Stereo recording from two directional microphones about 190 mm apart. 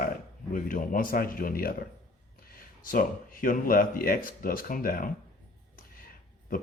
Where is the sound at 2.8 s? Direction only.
45° left (ahead or behind).